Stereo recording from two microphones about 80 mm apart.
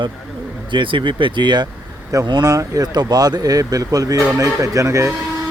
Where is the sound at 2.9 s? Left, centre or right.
Right.